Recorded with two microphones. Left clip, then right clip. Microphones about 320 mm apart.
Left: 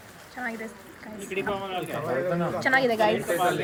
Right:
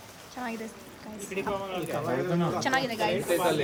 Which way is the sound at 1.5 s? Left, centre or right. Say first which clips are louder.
Left 2 dB; left.